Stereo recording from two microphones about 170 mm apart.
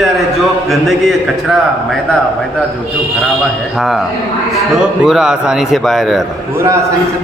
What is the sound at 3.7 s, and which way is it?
A man's voice, centre (ahead or behind).